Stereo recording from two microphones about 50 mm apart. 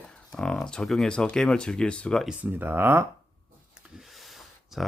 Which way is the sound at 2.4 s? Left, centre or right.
Right.